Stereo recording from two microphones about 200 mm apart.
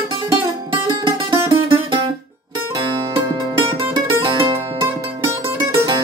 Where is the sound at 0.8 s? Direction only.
20° right (ahead or behind).